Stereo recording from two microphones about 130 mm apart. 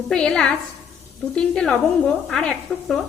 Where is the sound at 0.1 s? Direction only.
5° left (ahead or behind).